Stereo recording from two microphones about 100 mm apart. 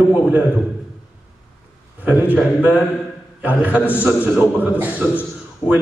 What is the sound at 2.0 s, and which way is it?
Speech, 15° right (ahead or behind).